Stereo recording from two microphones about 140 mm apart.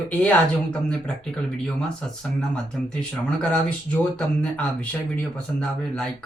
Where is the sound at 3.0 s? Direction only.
10° left (ahead or behind).